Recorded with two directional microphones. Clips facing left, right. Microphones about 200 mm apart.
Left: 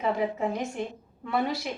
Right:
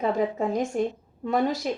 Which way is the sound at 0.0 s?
45° right (ahead or behind).